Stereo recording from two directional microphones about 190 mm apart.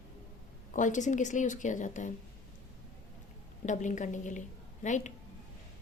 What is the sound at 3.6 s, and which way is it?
A woman's voice, 40° left (ahead or behind).